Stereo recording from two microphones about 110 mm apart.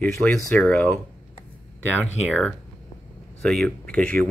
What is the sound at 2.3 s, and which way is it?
Speech, 10° left (ahead or behind).